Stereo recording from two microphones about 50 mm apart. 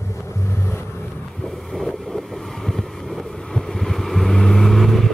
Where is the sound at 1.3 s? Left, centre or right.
Centre.